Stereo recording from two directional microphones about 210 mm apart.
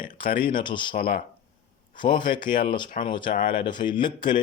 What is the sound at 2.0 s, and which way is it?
A man's voice, 20° left (ahead or behind).